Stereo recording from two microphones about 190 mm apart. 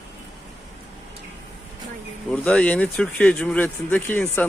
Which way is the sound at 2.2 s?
5° left (ahead or behind).